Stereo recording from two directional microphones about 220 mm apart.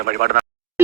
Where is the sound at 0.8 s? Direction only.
10° right (ahead or behind).